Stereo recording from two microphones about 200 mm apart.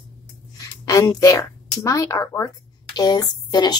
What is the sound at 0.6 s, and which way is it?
A woman's voice, 15° left (ahead or behind).